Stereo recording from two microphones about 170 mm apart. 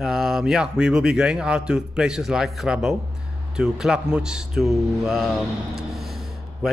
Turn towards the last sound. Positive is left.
turn(degrees=0)  # may be behind; listen again after turning